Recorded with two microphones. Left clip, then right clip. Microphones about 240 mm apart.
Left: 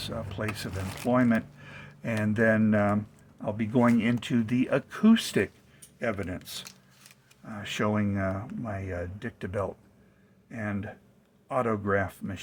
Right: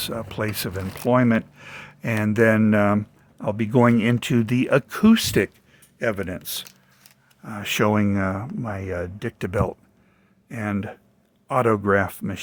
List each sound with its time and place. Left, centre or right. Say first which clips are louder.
0.0 s speech: right 7 dB; right